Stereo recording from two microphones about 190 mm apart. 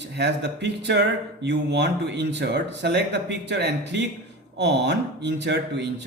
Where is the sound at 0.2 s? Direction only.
60° right (ahead or behind).